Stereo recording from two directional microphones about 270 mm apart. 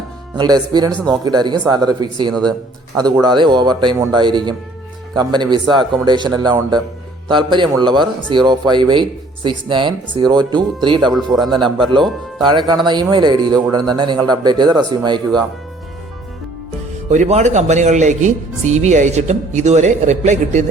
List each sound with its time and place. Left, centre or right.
0.3 s speech: centre
2.3 s speech: centre
3.0 s speech: centre
11.1 s speech: centre
11.5 s speech: centre
17.1 s speech: right